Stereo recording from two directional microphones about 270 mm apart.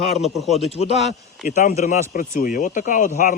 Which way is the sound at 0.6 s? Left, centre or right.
Left.